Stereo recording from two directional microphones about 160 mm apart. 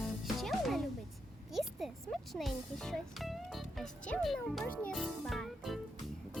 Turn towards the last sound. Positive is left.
turn(degrees=0)  # may be behind; listen again after turning